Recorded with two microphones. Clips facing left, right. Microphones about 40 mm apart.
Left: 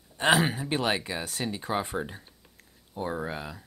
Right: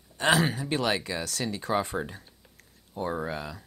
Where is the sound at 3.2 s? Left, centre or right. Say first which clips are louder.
Right 1 dB; centre.